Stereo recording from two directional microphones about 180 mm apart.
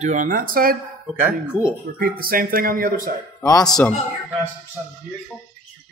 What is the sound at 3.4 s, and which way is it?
Speech, 20° left (ahead or behind).